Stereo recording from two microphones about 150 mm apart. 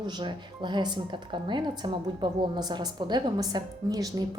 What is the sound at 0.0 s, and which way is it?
A woman's voice, 30° right (ahead or behind).